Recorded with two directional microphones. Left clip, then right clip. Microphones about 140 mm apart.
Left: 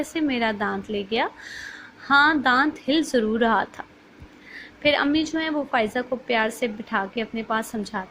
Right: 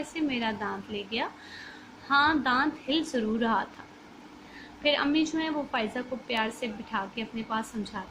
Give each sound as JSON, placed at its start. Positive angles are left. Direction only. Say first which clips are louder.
{"t": 0.1, "sound": "a woman's voice", "louder": "left 5 dB", "side_deg": 40}
{"t": 4.8, "sound": "a woman's voice", "louder": "left 5 dB", "side_deg": 45}